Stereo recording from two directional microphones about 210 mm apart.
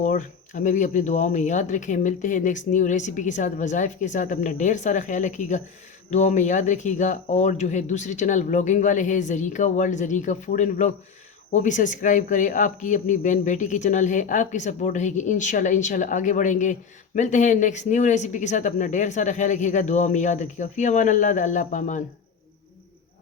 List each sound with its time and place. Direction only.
0.0 s speech: 35° left (ahead or behind)